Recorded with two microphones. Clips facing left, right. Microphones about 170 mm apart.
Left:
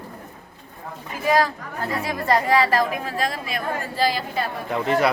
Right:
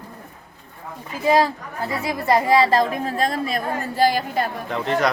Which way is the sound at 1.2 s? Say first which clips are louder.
Right 2 dB; 25° right (ahead or behind).